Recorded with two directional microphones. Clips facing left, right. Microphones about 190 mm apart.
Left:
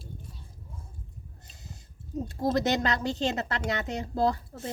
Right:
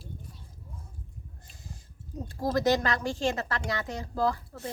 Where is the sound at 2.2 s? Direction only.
25° left (ahead or behind).